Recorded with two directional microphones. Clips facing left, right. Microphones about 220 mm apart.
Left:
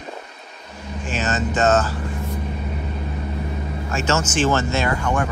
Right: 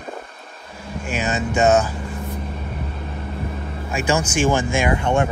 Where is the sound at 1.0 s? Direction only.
10° right (ahead or behind).